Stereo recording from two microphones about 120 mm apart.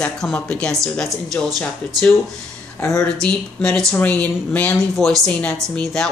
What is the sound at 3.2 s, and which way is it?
A woman's voice, 5° left (ahead or behind).